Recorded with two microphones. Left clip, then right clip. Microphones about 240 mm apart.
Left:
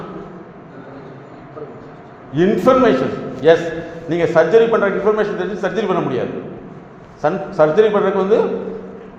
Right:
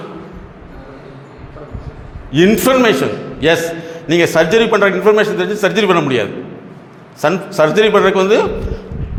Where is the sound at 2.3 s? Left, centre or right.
Right.